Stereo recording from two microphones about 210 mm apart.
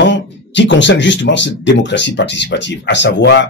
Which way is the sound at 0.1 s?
60° left (ahead or behind).